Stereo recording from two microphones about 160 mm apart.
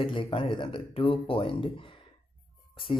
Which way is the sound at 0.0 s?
35° left (ahead or behind).